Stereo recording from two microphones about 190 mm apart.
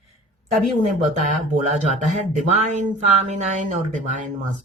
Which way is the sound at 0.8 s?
40° right (ahead or behind).